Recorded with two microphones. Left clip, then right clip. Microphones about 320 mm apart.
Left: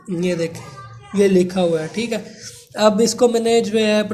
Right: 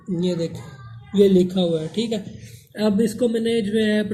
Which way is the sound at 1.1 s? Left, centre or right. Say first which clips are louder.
Left 1 dB; left.